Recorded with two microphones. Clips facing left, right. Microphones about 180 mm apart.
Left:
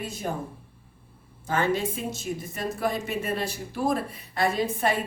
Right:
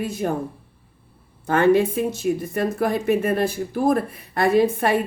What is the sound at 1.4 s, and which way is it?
A woman's voice, 60° right (ahead or behind).